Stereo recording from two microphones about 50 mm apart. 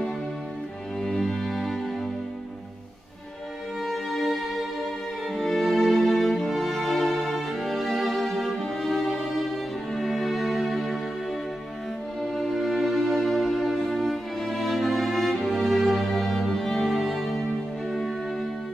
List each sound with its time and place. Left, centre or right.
1.0 s music: centre
3.8 s music: centre
12.2 s music: centre